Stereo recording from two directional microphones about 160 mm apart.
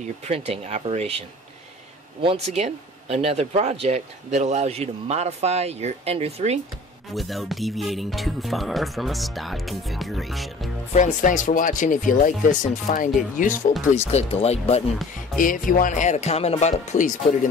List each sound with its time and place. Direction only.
0.0 s speech: 45° right (ahead or behind)
2.2 s speech: 40° right (ahead or behind)
7.2 s speech: centre (ahead or behind)
10.9 s speech: 50° left (ahead or behind)
14.1 s speech: 40° left (ahead or behind)
15.3 s speech: 55° left (ahead or behind)